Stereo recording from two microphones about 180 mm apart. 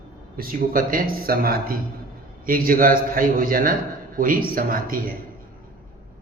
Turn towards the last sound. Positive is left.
turn(degrees=-55)  # may be behind; listen again after turning